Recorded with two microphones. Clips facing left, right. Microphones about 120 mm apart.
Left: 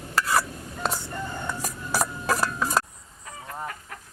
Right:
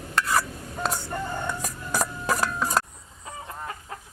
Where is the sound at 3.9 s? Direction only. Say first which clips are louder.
Right 3 dB; 25° right (ahead or behind).